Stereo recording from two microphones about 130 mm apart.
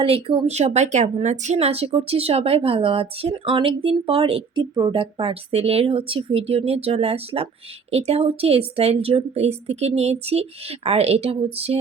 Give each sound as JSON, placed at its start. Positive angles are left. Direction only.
{"t": 0.0, "sound": "speech", "side_deg": -45}
{"t": 0.4, "sound": "speech", "side_deg": -60}